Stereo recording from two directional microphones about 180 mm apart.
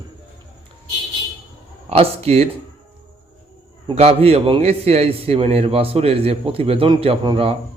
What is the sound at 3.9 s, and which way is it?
A man's voice, 35° right (ahead or behind).